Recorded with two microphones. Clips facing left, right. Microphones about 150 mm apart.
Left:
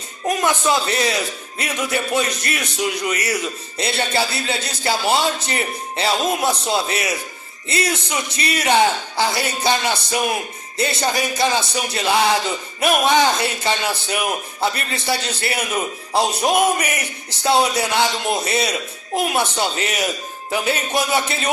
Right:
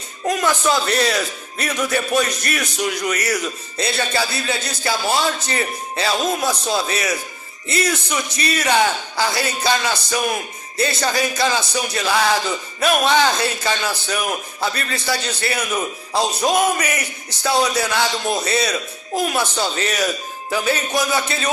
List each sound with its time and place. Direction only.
0.3 s a man's voice: 20° left (ahead or behind)